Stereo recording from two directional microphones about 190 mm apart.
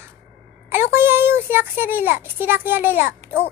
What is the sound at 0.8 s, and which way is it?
A child's voice, 10° right (ahead or behind).